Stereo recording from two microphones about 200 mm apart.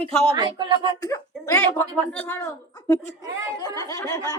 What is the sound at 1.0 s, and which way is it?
A woman's voice, 15° left (ahead or behind).